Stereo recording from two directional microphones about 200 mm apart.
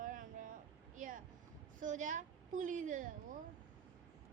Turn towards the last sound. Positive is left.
turn(degrees=-40)  # may be behind; listen again after turning